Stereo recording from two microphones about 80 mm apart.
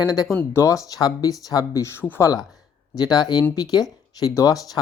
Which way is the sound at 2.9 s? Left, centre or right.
Left.